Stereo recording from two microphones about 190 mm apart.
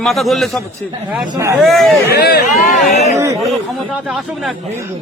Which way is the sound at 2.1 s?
55° left (ahead or behind).